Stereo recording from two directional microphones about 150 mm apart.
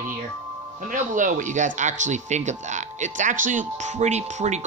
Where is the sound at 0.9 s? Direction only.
60° right (ahead or behind).